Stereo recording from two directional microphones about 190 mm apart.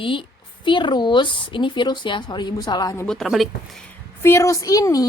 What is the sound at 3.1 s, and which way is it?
Speech, centre (ahead or behind).